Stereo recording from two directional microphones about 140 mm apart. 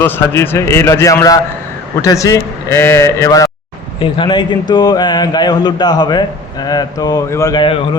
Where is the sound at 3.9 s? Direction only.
40° left (ahead or behind); by 7.5 s 20° left (ahead or behind).